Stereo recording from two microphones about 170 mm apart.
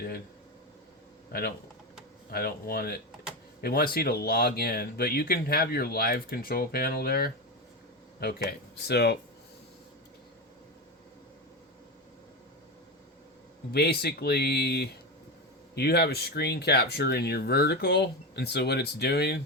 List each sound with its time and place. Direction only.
1.3 s speech: 60° left (ahead or behind)
13.7 s speech: 75° left (ahead or behind)